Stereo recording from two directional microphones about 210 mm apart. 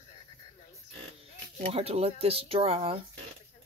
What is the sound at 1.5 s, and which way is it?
Speech, 30° right (ahead or behind).